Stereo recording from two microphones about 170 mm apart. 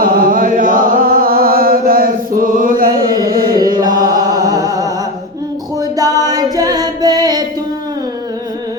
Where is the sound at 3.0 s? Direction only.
20° right (ahead or behind).